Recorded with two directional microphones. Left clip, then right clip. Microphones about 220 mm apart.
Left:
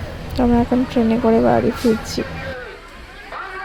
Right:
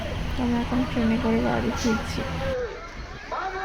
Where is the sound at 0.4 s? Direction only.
40° left (ahead or behind).